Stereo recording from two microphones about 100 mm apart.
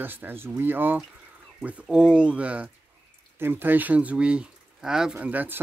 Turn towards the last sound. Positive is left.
turn(degrees=-15)  # may be behind; listen again after turning